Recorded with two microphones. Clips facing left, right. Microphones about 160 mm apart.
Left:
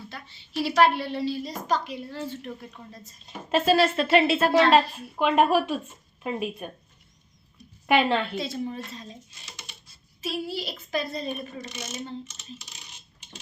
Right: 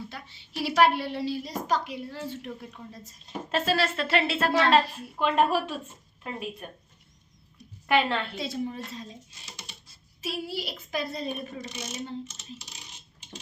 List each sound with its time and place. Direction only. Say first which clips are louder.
0.1 s a woman's voice: left 3 dB; 10° right (ahead or behind)
3.5 s speech: left 6 dB; 15° left (ahead or behind)
7.9 s speech: left 3 dB; 15° left (ahead or behind)
8.4 s a woman's voice: left 1 dB; 10° right (ahead or behind)
10.2 s a woman's voice: left 2 dB; 10° right (ahead or behind)
12.3 s coin: even; 35° right (ahead or behind)